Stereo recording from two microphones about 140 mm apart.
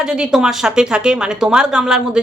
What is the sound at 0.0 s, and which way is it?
A woman's voice, 5° right (ahead or behind).